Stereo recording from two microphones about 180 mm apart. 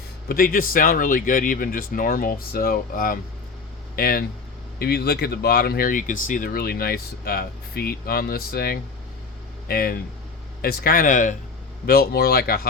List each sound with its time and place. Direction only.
0.3 s speech: 55° left (ahead or behind)
11.9 s speech: 60° left (ahead or behind)